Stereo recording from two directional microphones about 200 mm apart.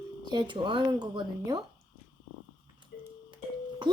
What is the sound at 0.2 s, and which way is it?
Speech, 20° right (ahead or behind).